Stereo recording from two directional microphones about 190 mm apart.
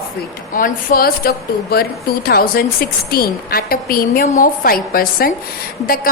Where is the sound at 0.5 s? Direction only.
45° left (ahead or behind).